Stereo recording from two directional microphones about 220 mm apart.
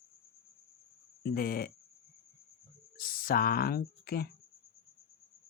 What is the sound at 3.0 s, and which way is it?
Speech, 40° left (ahead or behind).